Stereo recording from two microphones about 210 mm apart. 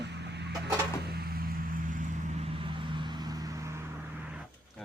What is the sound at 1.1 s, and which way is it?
Vehicle, 45° right (ahead or behind).